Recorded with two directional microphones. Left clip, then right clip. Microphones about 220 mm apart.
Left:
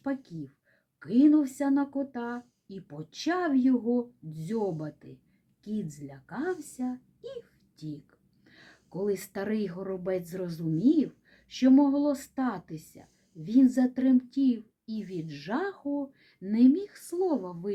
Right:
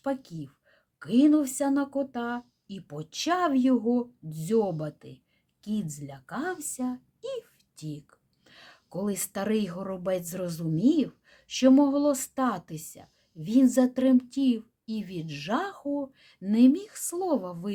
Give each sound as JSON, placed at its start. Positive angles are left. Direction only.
{"t": 0.0, "sound": "a woman's voice", "side_deg": -40}